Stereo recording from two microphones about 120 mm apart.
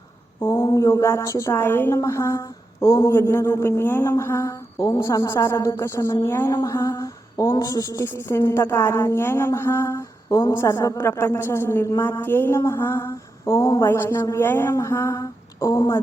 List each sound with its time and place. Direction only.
0.4 s speech: 30° left (ahead or behind)